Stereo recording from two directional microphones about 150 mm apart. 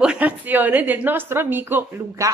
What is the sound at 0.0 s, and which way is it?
A woman's voice, 10° right (ahead or behind).